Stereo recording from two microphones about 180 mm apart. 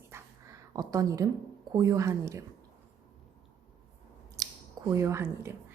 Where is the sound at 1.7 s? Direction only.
20° right (ahead or behind).